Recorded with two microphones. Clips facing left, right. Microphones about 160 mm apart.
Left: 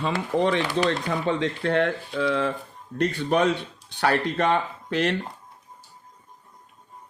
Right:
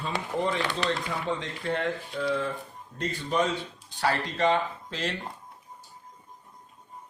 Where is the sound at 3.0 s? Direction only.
65° left (ahead or behind).